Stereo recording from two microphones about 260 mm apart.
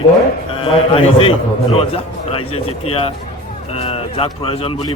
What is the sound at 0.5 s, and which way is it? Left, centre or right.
A man's voice, left.